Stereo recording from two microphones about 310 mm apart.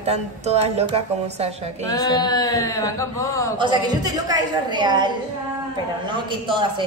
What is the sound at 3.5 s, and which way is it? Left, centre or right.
A woman's voice, centre.